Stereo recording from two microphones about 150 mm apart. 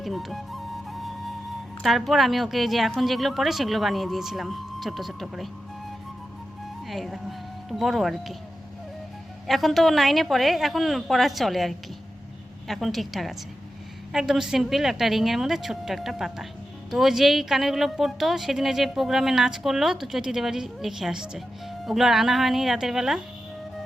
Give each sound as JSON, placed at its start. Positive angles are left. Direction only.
{"t": 0.0, "sound": "flute", "side_deg": 0}
{"t": 1.8, "sound": "a woman's voice", "side_deg": 0}
{"t": 6.8, "sound": "speech", "side_deg": 0}
{"t": 9.5, "sound": "a woman's voice", "side_deg": 0}